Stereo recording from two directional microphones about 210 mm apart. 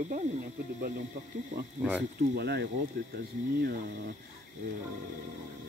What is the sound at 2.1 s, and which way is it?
Speech, 50° right (ahead or behind).